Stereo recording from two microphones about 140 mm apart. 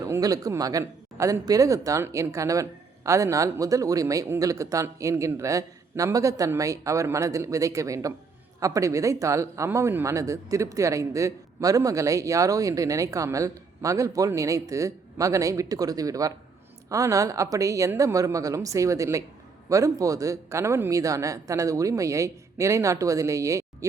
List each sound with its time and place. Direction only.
0.0 s speech: 25° right (ahead or behind)